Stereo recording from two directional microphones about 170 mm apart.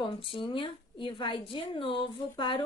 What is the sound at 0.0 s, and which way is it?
A woman's voice, 30° left (ahead or behind).